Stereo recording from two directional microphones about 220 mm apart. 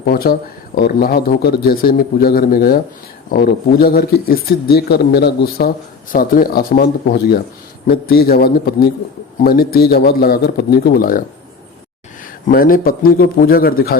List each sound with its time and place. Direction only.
0.0 s speech: 45° left (ahead or behind)
12.2 s a man's voice: 40° left (ahead or behind)